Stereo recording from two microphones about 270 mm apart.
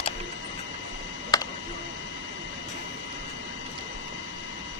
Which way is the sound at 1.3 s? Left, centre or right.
Centre.